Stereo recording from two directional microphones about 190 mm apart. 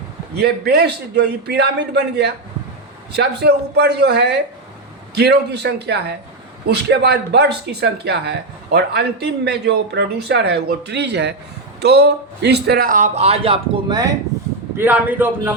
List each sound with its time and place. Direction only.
0.3 s a man's voice: 60° right (ahead or behind); by 14.1 s 25° right (ahead or behind)
14.8 s a man's voice: 10° right (ahead or behind)